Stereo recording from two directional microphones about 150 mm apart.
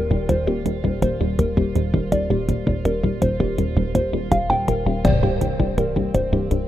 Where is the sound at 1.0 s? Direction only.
Centre (ahead or behind).